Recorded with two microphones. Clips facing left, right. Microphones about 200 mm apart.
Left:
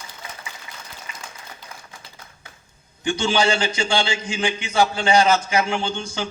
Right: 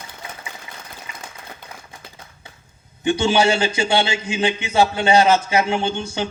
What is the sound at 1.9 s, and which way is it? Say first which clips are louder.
Typewriter: right 2 dB; 25° right (ahead or behind).